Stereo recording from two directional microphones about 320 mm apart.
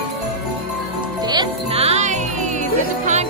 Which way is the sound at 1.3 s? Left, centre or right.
Centre.